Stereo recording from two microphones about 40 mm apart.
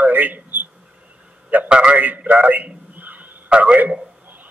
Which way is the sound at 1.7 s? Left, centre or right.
Right.